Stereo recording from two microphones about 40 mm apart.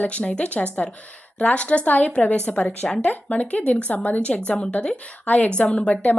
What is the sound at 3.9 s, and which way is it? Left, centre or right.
Speech, left.